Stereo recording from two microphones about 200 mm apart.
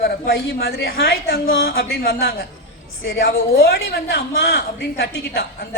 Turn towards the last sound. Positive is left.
turn(degrees=55)  # may be behind; listen again after turning